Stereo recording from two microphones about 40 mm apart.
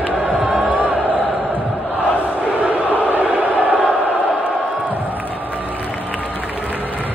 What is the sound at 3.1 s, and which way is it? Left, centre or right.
Chant, right.